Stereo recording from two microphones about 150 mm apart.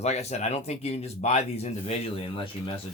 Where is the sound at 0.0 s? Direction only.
45° left (ahead or behind).